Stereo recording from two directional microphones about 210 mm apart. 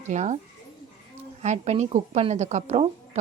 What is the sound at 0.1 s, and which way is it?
Speech, 35° right (ahead or behind).